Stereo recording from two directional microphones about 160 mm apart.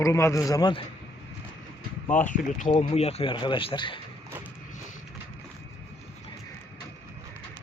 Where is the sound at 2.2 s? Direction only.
55° left (ahead or behind); by 4.0 s 30° left (ahead or behind).